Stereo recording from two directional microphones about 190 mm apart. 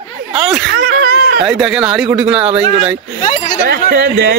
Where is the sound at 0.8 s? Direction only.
50° right (ahead or behind).